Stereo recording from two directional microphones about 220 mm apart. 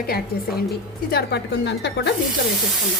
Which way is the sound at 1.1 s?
50° left (ahead or behind).